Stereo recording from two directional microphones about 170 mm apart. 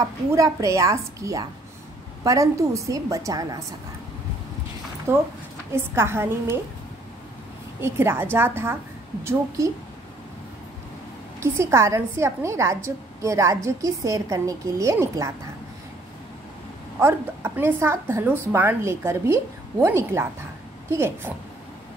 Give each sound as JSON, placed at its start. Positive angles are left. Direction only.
{"t": 0.3, "sound": "a woman's voice", "side_deg": -20}
{"t": 5.1, "sound": "a woman's voice", "side_deg": -15}
{"t": 7.8, "sound": "a woman's voice", "side_deg": -15}
{"t": 11.3, "sound": "a woman's voice", "side_deg": -15}
{"t": 17.0, "sound": "a woman's voice", "side_deg": -15}